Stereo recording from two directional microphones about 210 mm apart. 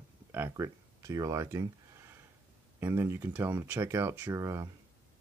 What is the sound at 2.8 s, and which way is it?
Speech, 15° right (ahead or behind).